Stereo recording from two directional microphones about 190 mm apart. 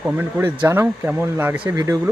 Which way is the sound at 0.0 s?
10° right (ahead or behind).